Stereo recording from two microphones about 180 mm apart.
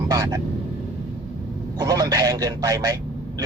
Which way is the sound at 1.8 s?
20° right (ahead or behind).